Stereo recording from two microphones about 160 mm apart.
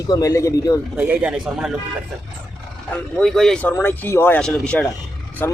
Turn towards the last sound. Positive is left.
turn(degrees=15)  # may be behind; listen again after turning